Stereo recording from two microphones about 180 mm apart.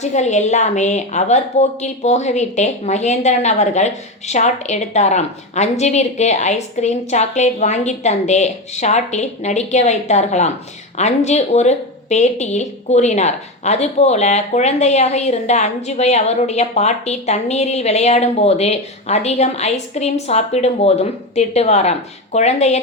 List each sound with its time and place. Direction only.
0.0 s a woman's voice: 40° left (ahead or behind)